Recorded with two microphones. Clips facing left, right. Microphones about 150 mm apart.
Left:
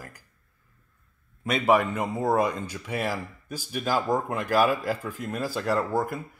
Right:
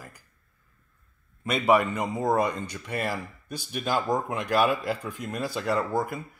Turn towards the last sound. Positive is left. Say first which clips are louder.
# left 1 dB
turn(degrees=5)  # may be behind; listen again after turning